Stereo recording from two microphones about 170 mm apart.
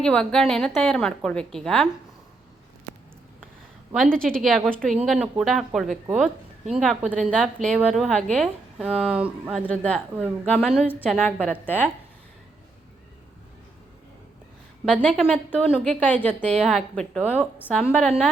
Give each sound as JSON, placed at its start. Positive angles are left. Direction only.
{"t": 0.0, "sound": "a woman's voice", "side_deg": 5}
{"t": 3.9, "sound": "a woman's voice", "side_deg": 0}
{"t": 9.6, "sound": "a woman's voice", "side_deg": 5}
{"t": 15.0, "sound": "a woman's voice", "side_deg": 5}